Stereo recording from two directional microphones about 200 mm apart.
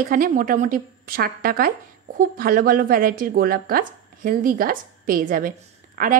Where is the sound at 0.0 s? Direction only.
45° right (ahead or behind).